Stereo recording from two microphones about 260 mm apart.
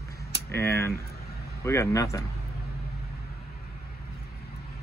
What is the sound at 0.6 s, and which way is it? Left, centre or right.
Speech, centre.